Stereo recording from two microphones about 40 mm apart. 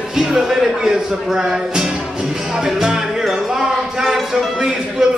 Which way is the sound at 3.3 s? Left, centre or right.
Centre.